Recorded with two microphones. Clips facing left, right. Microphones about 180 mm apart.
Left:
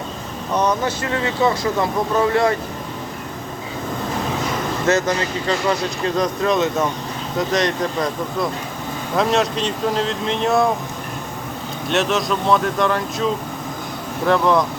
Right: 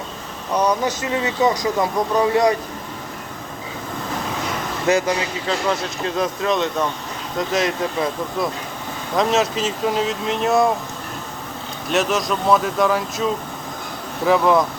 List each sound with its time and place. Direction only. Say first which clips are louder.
0.5 s speech: even; 15° right (ahead or behind)
4.9 s speech: even; 10° right (ahead or behind)
11.9 s speech: even; centre (ahead or behind)